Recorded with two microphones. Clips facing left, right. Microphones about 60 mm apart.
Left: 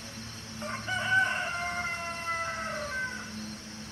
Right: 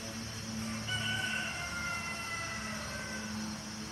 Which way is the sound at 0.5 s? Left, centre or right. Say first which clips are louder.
Left 6 dB; left.